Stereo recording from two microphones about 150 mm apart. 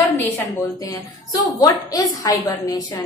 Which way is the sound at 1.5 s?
25° left (ahead or behind).